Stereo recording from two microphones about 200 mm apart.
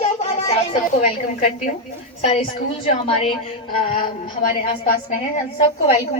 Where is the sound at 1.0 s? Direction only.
35° left (ahead or behind).